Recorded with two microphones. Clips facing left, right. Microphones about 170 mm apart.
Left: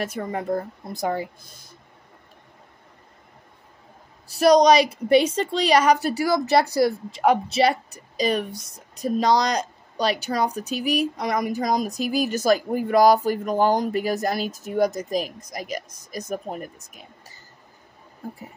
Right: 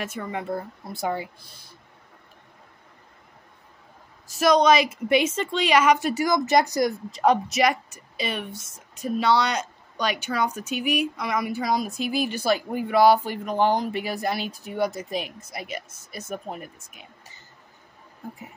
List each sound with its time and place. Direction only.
0.0 s a woman's voice: 40° left (ahead or behind)
4.3 s a woman's voice: 35° left (ahead or behind)